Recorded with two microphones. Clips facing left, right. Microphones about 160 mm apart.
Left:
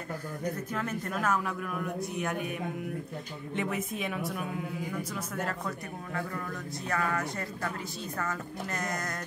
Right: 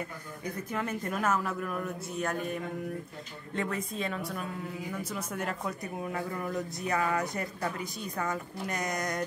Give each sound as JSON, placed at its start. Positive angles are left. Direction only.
{"t": 0.7, "sound": "speech", "side_deg": -5}
{"t": 3.5, "sound": "a woman's voice", "side_deg": 15}
{"t": 4.0, "sound": "speech", "side_deg": 0}
{"t": 5.1, "sound": "speech", "side_deg": -5}
{"t": 6.3, "sound": "speech", "side_deg": -20}